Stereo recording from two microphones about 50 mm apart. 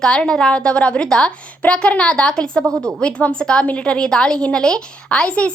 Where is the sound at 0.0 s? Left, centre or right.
Centre.